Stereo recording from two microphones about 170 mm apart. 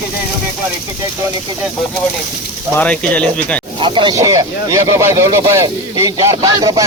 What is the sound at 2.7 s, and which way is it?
Speech, 5° left (ahead or behind).